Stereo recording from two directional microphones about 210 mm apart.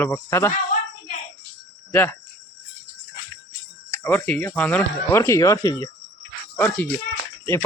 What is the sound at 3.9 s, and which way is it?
Speech, 10° left (ahead or behind).